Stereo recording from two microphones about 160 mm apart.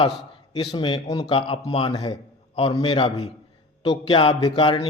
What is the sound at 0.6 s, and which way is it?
A man's voice, 30° left (ahead or behind).